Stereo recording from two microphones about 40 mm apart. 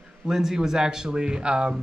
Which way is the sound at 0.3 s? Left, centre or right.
Centre.